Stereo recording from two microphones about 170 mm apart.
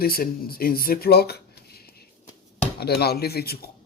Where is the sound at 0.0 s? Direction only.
60° left (ahead or behind).